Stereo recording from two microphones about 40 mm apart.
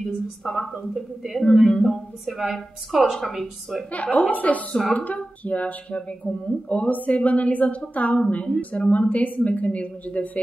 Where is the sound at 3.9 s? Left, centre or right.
Left.